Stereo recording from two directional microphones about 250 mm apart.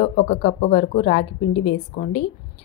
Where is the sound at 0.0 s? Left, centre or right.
Left.